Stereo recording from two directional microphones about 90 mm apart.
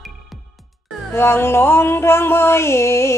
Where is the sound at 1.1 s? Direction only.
25° left (ahead or behind).